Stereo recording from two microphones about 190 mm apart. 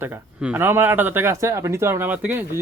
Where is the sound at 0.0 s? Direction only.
10° right (ahead or behind).